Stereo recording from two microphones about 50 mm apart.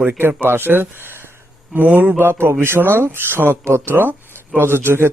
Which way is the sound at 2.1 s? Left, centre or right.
Right.